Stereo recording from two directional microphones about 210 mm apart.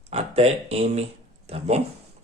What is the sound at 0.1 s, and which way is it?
Speech, 30° right (ahead or behind).